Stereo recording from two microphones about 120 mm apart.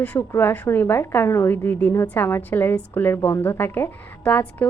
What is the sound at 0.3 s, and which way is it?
A woman's voice, 20° left (ahead or behind).